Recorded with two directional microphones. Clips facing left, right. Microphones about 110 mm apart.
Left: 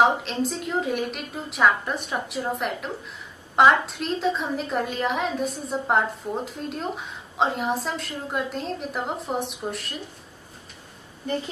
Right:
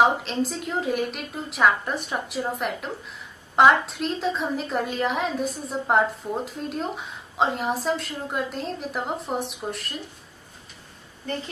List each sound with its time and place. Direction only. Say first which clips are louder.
0.0 s a woman's voice: even; centre (ahead or behind)